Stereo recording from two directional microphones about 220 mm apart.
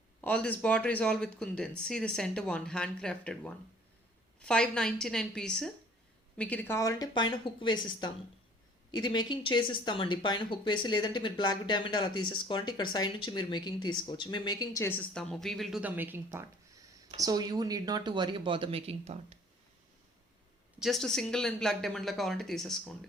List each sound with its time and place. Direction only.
0.2 s speech: 5° left (ahead or behind); by 19.2 s 30° right (ahead or behind)
20.7 s speech: centre (ahead or behind)